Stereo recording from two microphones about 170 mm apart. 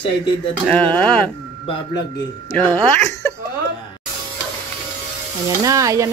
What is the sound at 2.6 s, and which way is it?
Speech, 30° right (ahead or behind).